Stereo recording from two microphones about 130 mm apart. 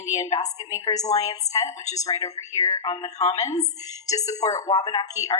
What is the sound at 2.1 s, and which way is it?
A woman's voice, 25° left (ahead or behind).